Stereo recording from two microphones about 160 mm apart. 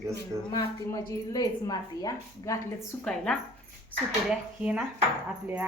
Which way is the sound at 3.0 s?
5° left (ahead or behind).